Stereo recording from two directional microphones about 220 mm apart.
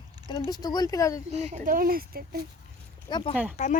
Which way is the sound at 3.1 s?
20° left (ahead or behind).